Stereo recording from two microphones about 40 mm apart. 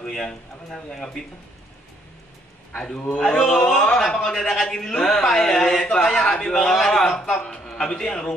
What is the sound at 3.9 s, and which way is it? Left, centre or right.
A man's voice, centre.